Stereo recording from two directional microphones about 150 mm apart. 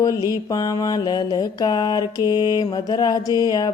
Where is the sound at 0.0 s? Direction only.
25° left (ahead or behind).